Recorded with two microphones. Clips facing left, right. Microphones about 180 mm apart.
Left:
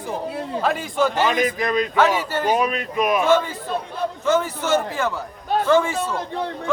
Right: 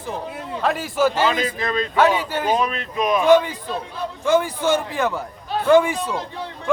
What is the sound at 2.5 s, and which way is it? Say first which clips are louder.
Speech: left 1 dB; 10° left (ahead or behind).